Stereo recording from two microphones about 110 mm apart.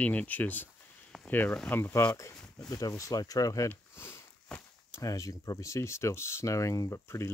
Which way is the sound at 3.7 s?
20° left (ahead or behind).